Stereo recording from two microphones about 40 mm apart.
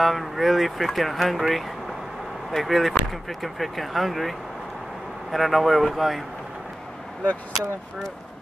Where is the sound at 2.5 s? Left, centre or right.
Centre.